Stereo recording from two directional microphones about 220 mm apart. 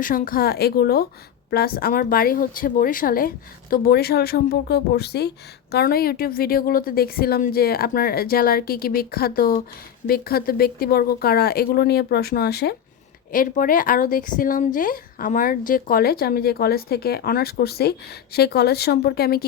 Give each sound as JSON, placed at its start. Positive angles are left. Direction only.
{"t": 0.0, "sound": "a woman's voice", "side_deg": 40}